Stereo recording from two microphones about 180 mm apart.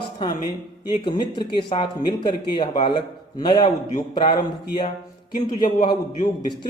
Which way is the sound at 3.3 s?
25° left (ahead or behind).